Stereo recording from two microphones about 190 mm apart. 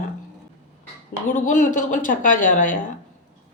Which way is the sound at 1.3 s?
45° left (ahead or behind).